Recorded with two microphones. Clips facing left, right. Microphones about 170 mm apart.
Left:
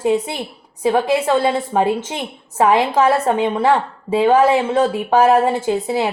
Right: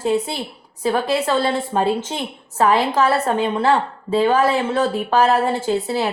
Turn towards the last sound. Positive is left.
turn(degrees=15)  # may be behind; listen again after turning